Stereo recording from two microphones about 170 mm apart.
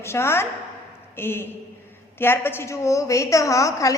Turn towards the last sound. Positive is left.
turn(degrees=20)  # may be behind; listen again after turning